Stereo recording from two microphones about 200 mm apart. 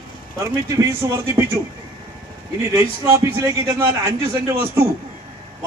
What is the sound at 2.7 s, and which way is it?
A man's voice, 15° right (ahead or behind).